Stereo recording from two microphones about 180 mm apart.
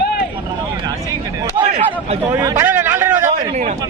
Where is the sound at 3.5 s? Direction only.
40° right (ahead or behind).